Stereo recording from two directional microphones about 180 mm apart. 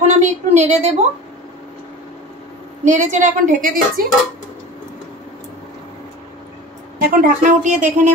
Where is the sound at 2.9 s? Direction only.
40° right (ahead or behind).